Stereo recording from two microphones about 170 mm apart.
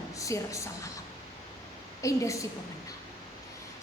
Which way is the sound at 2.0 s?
20° left (ahead or behind).